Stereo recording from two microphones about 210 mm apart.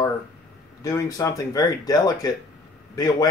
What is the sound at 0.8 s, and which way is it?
A man's voice, 15° left (ahead or behind).